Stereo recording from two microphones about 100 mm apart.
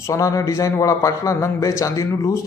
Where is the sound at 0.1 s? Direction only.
35° left (ahead or behind).